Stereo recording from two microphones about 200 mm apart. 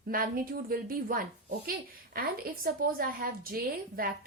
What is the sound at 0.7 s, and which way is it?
A woman's voice, 45° right (ahead or behind).